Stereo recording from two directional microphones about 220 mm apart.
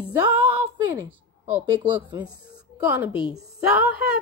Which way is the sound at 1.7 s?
20° right (ahead or behind).